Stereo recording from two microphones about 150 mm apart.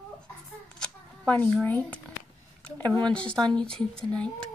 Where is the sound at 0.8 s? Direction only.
10° left (ahead or behind).